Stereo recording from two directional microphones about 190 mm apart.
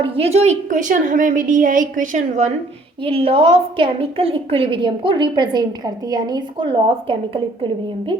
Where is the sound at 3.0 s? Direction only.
30° right (ahead or behind).